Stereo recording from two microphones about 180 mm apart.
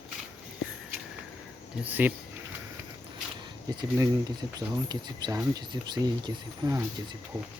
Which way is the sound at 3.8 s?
20° right (ahead or behind).